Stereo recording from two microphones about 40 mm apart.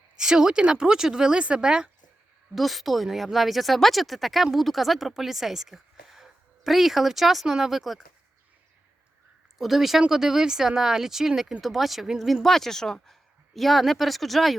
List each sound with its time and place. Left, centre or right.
0.2 s speech: centre
2.6 s speech: centre
9.6 s speech: centre